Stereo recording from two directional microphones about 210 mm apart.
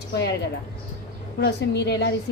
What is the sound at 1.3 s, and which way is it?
Speech, 55° left (ahead or behind).